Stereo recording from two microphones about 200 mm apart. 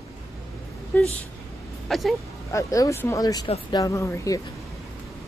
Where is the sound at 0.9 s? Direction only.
10° left (ahead or behind).